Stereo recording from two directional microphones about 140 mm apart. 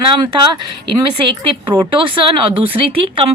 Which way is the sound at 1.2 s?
35° right (ahead or behind).